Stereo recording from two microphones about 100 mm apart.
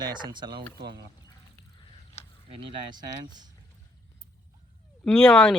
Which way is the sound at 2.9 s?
45° right (ahead or behind).